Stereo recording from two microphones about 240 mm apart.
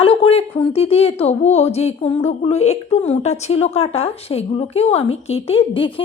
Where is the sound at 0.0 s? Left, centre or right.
Left.